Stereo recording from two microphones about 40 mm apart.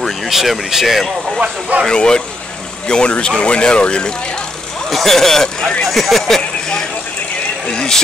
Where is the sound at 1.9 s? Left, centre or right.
Left.